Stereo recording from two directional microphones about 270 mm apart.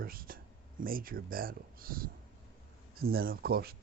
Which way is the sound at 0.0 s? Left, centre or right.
Right.